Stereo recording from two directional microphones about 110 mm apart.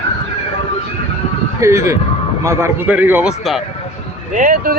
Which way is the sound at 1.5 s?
25° right (ahead or behind).